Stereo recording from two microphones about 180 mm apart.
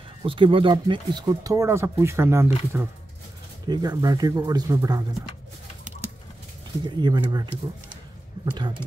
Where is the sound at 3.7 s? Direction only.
20° right (ahead or behind).